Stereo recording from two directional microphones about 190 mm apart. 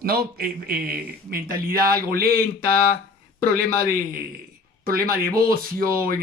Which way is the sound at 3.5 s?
50° right (ahead or behind).